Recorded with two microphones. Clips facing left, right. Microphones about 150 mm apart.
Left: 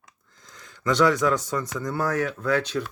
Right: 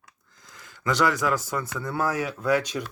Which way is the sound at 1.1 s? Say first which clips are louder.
Left 3 dB; 5° right (ahead or behind).